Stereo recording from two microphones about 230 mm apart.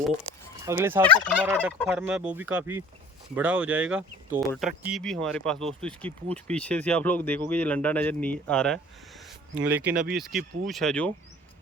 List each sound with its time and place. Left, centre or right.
0.6 s fowl: centre
1.0 s speech: centre
1.4 s fowl: centre
1.8 s speech: centre
9.9 s speech: right
10.2 s speech: centre